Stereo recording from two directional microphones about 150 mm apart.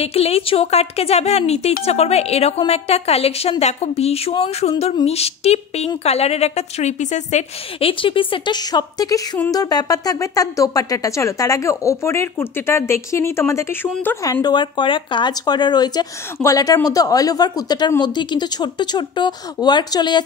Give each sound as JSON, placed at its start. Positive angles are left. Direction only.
{"t": 0.0, "sound": "a woman's voice", "side_deg": 40}
{"t": 7.9, "sound": "speech", "side_deg": 35}